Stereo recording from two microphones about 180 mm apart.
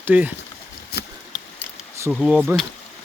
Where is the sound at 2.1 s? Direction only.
5° right (ahead or behind).